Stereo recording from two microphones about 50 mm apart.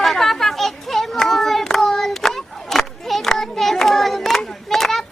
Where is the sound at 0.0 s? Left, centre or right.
Centre.